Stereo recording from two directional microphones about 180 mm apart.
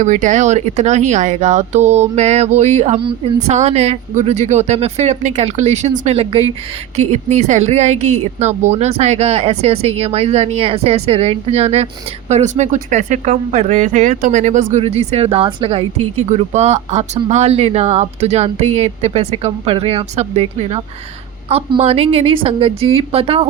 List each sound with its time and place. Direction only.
0.0 s a woman's voice: 45° right (ahead or behind)